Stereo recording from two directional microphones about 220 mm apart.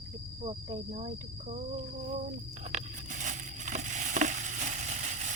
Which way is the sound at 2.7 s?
35° right (ahead or behind).